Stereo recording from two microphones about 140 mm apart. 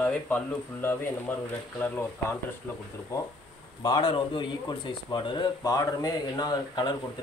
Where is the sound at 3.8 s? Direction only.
35° left (ahead or behind).